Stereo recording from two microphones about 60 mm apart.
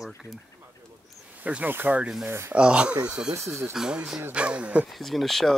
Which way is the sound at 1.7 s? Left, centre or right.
Right.